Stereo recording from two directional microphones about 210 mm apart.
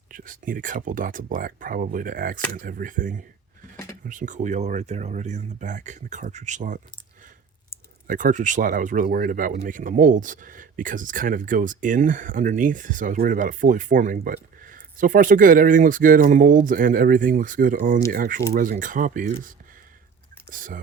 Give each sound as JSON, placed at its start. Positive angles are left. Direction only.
{"t": 0.1, "sound": "speech", "side_deg": -40}
{"t": 8.0, "sound": "speech", "side_deg": -40}